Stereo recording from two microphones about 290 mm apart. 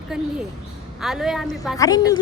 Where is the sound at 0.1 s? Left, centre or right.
Centre.